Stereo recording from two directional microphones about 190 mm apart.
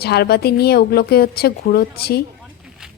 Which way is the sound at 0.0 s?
55° left (ahead or behind).